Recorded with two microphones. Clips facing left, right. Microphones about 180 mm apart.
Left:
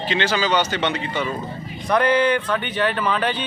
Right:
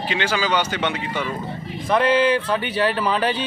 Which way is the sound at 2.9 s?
35° right (ahead or behind).